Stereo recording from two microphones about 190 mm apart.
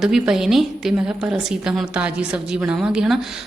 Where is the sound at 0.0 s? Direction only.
5° right (ahead or behind).